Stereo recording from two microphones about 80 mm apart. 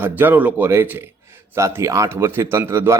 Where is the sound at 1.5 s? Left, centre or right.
Right.